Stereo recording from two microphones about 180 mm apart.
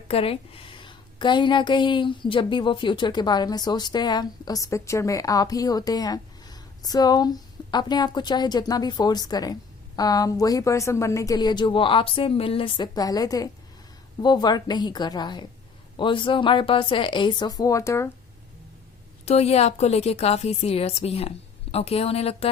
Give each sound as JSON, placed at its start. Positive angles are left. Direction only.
{"t": 0.1, "sound": "a woman's voice", "side_deg": 30}
{"t": 19.2, "sound": "a woman's voice", "side_deg": 35}